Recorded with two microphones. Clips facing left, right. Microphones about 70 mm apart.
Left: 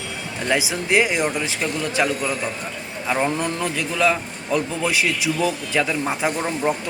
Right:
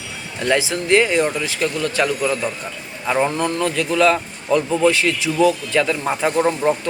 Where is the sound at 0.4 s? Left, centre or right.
Centre.